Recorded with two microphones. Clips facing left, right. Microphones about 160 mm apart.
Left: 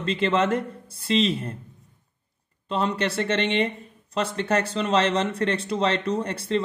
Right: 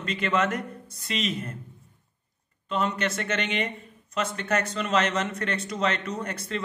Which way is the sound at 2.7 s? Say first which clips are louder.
Left 2 dB; 30° left (ahead or behind).